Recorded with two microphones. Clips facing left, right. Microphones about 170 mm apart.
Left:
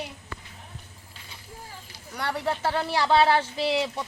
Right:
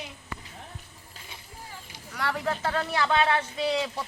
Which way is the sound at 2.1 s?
30° left (ahead or behind).